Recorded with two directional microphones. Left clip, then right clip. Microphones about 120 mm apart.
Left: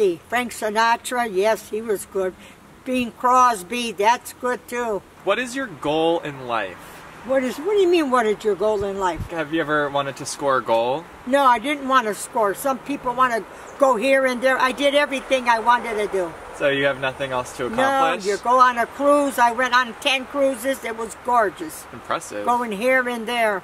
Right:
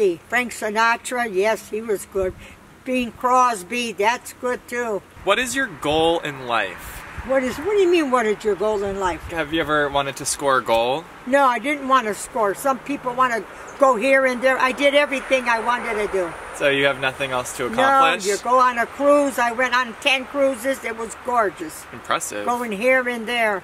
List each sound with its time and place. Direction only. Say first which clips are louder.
0.0 s speech: right 1 dB; 10° left (ahead or behind)
5.2 s speech: right 4 dB; 15° right (ahead or behind)
7.3 s speech: even; 5° left (ahead or behind)
9.3 s speech: right 1 dB; 10° right (ahead or behind)
11.2 s speech: left 1 dB; 10° left (ahead or behind)
16.5 s speech: right 1 dB; 15° right (ahead or behind)
18.5 s speech: left 1 dB; 10° left (ahead or behind)
22.0 s speech: right 2 dB; 15° right (ahead or behind)
22.5 s speech: even; 10° left (ahead or behind)